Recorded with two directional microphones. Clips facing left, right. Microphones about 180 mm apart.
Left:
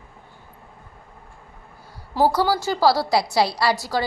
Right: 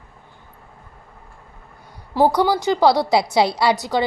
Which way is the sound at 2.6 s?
20° right (ahead or behind).